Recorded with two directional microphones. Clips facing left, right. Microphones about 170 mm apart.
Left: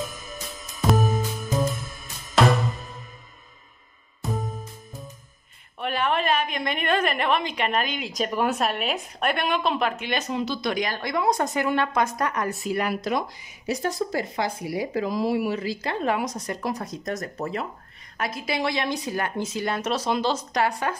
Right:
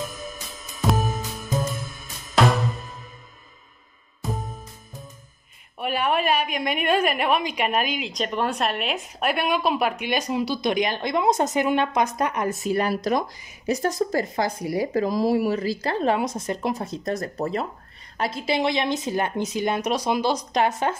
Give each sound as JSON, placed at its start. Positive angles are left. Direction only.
{"t": 0.0, "sound": "music", "side_deg": 0}
{"t": 5.8, "sound": "a woman's voice", "side_deg": -10}
{"t": 8.0, "sound": "a woman's voice", "side_deg": 0}
{"t": 12.7, "sound": "a woman's voice", "side_deg": -35}